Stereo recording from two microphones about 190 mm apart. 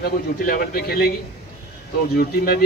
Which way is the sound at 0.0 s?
55° left (ahead or behind).